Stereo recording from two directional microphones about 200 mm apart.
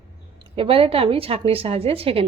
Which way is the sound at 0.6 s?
25° right (ahead or behind).